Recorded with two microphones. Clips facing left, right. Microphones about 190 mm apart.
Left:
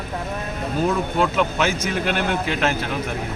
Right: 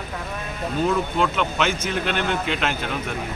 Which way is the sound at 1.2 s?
5° left (ahead or behind).